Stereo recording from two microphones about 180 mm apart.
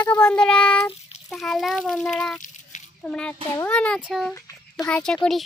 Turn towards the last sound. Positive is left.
turn(degrees=0)  # may be behind; listen again after turning